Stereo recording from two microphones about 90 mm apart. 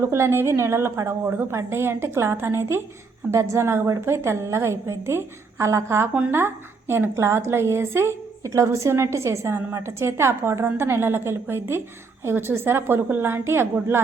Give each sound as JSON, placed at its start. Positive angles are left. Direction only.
{"t": 0.1, "sound": "a woman's voice", "side_deg": -30}